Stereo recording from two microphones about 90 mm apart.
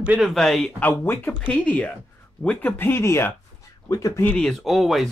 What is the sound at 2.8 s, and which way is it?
Speech, 25° left (ahead or behind).